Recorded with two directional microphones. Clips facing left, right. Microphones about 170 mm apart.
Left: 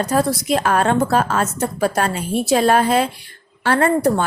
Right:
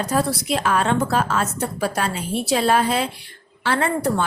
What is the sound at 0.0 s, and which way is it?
A woman's voice, 45° left (ahead or behind).